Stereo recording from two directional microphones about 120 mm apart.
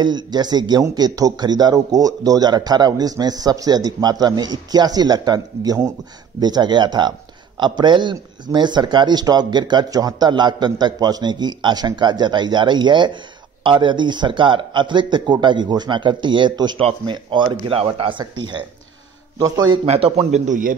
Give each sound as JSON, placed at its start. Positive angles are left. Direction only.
{"t": 0.0, "sound": "speech", "side_deg": -35}
{"t": 19.7, "sound": "a man's voice", "side_deg": -50}